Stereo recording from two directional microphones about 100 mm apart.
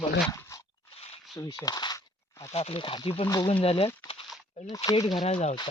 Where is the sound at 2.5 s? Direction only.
85° left.